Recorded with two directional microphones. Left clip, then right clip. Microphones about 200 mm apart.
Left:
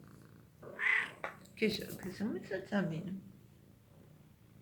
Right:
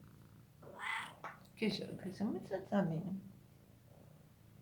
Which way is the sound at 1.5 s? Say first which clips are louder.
Left 5 dB; 10° right (ahead or behind).